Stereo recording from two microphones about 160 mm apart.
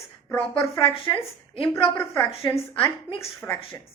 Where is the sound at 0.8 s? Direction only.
35° left (ahead or behind).